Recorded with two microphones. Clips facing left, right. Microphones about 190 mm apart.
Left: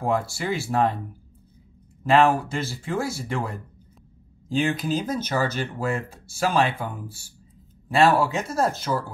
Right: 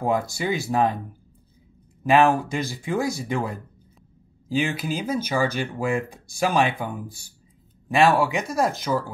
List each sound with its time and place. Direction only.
0.0 s speech: 20° right (ahead or behind)
2.0 s speech: 15° right (ahead or behind)